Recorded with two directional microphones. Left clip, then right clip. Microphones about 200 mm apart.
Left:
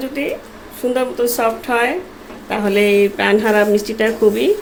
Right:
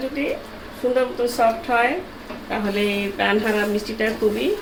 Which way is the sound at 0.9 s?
60° left (ahead or behind).